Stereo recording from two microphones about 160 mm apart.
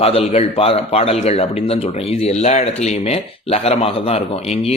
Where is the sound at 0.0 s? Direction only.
35° left (ahead or behind).